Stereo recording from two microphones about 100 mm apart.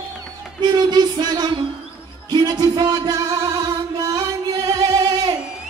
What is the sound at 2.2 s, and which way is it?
Music, 40° right (ahead or behind).